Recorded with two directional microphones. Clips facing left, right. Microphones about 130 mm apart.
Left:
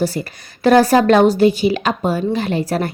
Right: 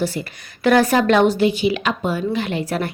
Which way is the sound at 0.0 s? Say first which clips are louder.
Left 3 dB; 35° left (ahead or behind).